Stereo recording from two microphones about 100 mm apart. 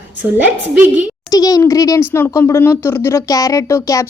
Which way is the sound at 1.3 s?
40° left (ahead or behind).